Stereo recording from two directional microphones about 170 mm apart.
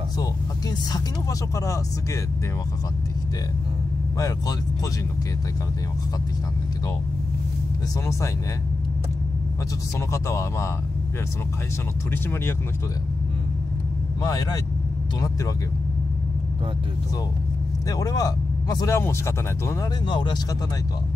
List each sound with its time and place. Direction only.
9.9 s speech: 15° left (ahead or behind)
12.1 s speech: 15° left (ahead or behind)
14.2 s speech: 20° left (ahead or behind)
17.8 s speech: 20° left (ahead or behind)
20.1 s speech: 25° left (ahead or behind)